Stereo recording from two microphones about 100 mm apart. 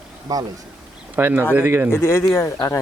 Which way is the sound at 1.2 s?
20° right (ahead or behind).